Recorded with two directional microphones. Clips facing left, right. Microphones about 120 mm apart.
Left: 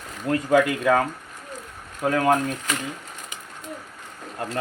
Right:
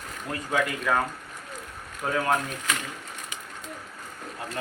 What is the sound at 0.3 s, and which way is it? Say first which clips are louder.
Speech: left 8 dB; 70° left (ahead or behind).